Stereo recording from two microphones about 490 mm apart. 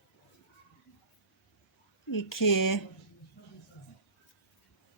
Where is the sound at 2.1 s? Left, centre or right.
Left.